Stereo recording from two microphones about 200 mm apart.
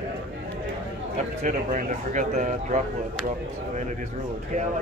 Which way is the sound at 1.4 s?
40° right (ahead or behind).